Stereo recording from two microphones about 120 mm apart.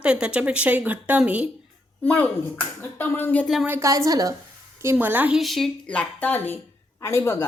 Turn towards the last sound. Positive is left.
turn(degrees=20)  # may be behind; listen again after turning